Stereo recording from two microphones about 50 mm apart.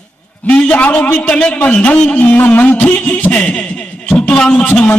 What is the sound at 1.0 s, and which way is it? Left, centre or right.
Music, left.